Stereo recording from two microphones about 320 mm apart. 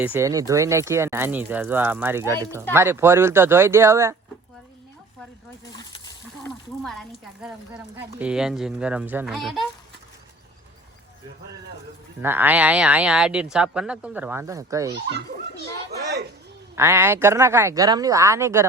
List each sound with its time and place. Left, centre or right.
0.0 s speech: centre
6.4 s speech: centre
12.2 s speech: centre
16.7 s speech: centre